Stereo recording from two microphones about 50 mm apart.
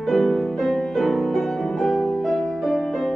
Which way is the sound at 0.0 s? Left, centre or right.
Centre.